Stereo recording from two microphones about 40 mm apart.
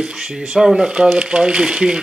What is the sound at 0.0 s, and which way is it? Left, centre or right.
Speech, centre.